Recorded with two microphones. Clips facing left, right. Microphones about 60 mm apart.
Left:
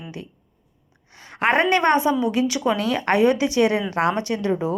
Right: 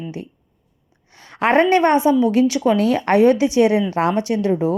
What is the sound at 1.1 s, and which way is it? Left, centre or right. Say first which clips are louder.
A woman's voice: right 4 dB; left.